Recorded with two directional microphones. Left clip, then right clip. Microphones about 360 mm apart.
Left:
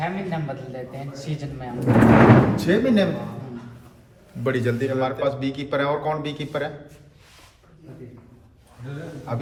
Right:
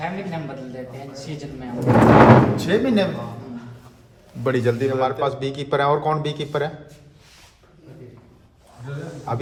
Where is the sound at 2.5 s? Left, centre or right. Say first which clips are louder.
Even; centre.